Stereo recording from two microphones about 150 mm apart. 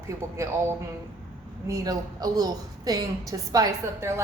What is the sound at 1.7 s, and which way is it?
A woman's voice, 25° right (ahead or behind).